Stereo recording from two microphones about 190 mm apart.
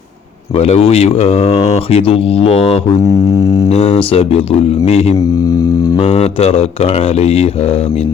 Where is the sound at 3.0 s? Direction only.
20° left (ahead or behind).